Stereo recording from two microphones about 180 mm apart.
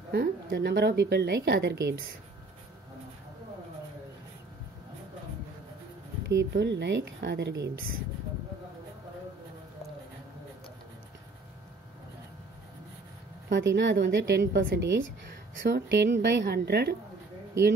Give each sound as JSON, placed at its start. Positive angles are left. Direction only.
{"t": 0.1, "sound": "a woman's voice", "side_deg": -60}
{"t": 6.2, "sound": "a woman's voice", "side_deg": -75}
{"t": 13.5, "sound": "a woman's voice", "side_deg": -85}